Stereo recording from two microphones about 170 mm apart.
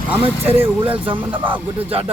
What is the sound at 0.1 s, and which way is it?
Speech, 10° right (ahead or behind).